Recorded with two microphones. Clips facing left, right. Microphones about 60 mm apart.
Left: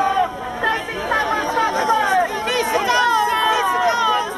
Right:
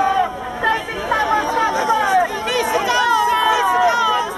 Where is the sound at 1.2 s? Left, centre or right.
Centre.